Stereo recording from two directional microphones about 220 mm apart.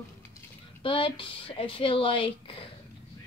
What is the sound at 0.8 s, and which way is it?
Speech, 25° left (ahead or behind).